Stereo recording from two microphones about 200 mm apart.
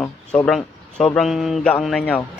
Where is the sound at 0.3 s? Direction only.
5° left (ahead or behind).